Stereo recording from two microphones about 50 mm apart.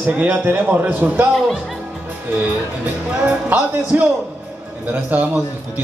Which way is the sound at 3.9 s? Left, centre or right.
Right.